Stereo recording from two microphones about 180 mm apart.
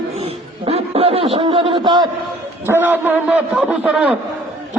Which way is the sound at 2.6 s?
10° right (ahead or behind).